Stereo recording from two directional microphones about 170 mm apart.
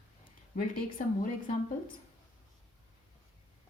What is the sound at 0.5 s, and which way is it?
Speech, 50° left (ahead or behind).